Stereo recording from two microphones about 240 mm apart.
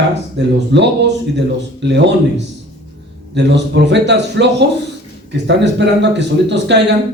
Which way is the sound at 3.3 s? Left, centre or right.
Right.